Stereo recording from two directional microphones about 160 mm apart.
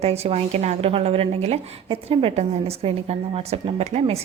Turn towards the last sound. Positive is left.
turn(degrees=-40)  # may be behind; listen again after turning